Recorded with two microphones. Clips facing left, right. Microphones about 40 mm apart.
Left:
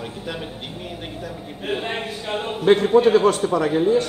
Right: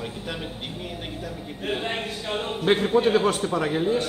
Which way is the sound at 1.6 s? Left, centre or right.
Centre.